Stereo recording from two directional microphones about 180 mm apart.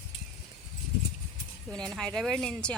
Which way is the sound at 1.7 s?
5° left (ahead or behind).